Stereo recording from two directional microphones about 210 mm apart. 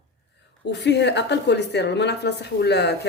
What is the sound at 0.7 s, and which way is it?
A woman's voice, 55° left (ahead or behind).